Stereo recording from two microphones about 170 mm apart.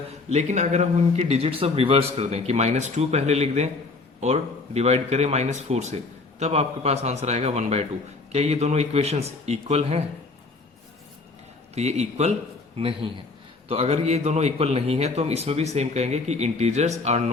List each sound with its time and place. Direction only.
0.3 s a man's voice: 45° right (ahead or behind)
11.7 s a man's voice: 40° right (ahead or behind)